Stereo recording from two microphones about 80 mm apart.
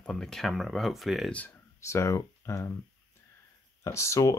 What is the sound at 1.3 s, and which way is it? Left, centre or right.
Speech, centre.